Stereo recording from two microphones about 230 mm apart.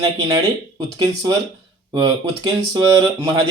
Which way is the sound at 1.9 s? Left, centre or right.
Centre.